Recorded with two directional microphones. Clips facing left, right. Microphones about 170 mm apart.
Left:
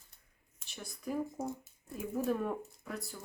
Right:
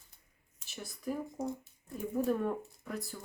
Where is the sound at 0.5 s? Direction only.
5° right (ahead or behind).